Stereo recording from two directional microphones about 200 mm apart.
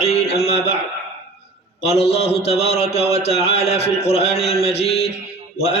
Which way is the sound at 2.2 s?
30° left (ahead or behind).